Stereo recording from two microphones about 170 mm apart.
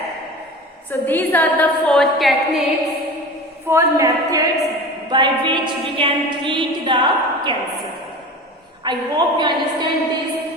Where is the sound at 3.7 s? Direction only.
15° right (ahead or behind).